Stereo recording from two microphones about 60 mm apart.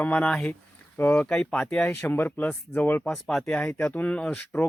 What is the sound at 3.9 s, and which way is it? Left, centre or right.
Speech, left.